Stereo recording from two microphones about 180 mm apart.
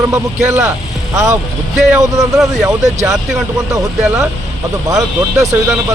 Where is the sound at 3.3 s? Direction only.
20° right (ahead or behind).